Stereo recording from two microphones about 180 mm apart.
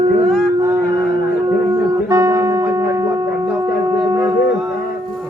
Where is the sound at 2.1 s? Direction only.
20° right (ahead or behind).